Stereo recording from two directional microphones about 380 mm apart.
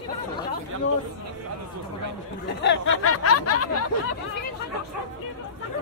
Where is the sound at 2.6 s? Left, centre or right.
Left.